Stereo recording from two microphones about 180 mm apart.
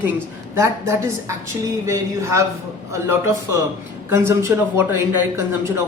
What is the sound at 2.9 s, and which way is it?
Speech, 15° right (ahead or behind).